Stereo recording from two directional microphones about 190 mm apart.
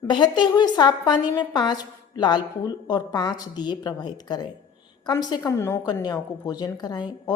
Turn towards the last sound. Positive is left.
turn(degrees=20)  # may be behind; listen again after turning